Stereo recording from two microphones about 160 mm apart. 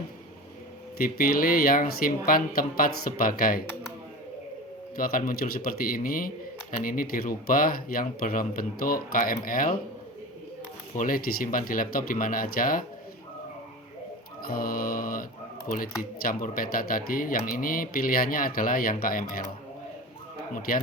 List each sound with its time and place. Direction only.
0.9 s speech: 65° left (ahead or behind)
4.9 s speech: 60° left (ahead or behind)
10.9 s speech: 60° left (ahead or behind)
14.4 s speech: 65° left (ahead or behind)
20.6 s speech: 65° left (ahead or behind)